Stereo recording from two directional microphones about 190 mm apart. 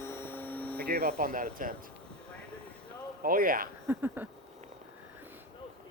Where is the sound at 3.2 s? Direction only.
50° right (ahead or behind).